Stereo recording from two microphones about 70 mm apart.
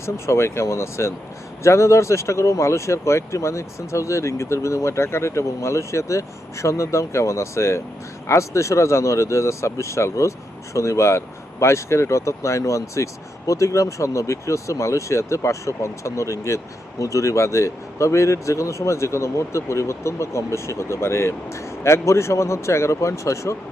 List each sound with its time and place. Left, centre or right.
0.0 s a man's voice: left